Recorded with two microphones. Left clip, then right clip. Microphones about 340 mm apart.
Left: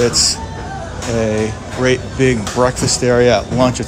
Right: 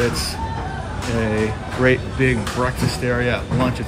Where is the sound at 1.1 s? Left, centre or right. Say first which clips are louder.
Left 4 dB; centre.